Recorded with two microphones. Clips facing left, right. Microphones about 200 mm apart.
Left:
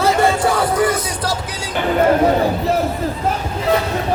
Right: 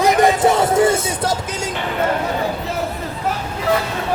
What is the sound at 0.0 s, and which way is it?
Music, 15° right (ahead or behind).